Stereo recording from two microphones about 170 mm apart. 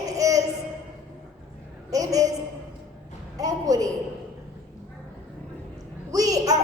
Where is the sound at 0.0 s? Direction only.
20° right (ahead or behind).